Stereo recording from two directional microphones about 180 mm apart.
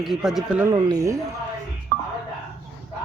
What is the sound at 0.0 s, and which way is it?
Speech, centre (ahead or behind).